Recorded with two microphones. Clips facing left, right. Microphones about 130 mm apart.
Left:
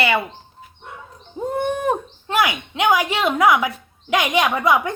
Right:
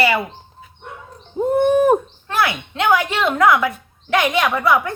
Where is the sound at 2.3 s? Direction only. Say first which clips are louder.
Even; 15° left (ahead or behind).